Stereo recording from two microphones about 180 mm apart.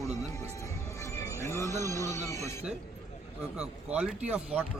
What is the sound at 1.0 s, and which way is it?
Music, 15° left (ahead or behind).